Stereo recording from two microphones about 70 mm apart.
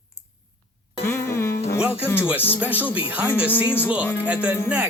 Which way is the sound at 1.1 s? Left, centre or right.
Left.